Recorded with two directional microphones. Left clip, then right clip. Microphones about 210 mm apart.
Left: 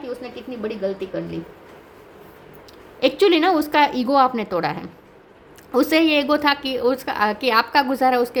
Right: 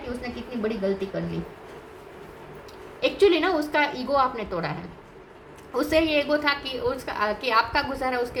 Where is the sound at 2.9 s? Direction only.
50° left (ahead or behind).